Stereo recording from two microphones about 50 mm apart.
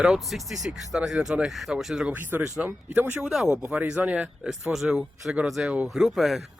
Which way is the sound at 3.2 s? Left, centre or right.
Centre.